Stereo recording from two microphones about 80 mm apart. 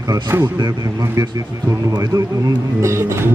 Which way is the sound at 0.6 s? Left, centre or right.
Right.